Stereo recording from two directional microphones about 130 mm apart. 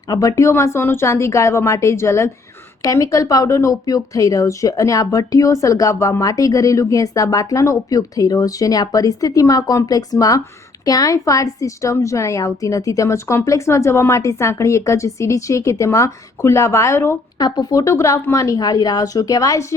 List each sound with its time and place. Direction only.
0.1 s speech: 25° left (ahead or behind)
17.3 s speech: 30° left (ahead or behind)